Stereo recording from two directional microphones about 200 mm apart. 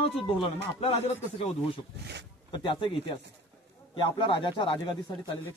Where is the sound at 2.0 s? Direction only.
60° right (ahead or behind).